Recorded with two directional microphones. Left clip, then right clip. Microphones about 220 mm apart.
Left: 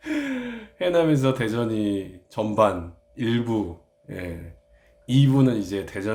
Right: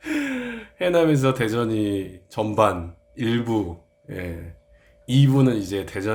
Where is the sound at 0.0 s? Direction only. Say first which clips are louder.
Right 2 dB; 5° right (ahead or behind).